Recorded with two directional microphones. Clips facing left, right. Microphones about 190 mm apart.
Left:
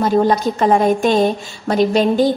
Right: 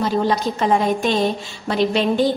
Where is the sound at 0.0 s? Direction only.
45° left (ahead or behind).